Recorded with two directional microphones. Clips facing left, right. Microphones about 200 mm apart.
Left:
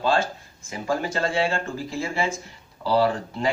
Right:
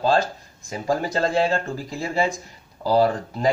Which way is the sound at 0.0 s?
35° right (ahead or behind).